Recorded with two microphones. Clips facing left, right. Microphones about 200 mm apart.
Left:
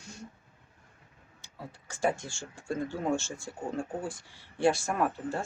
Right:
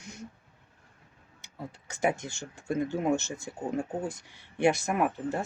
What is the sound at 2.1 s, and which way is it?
Speech, 20° right (ahead or behind).